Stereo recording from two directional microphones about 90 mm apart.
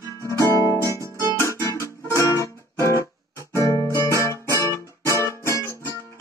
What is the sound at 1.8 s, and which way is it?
Music, 35° left (ahead or behind).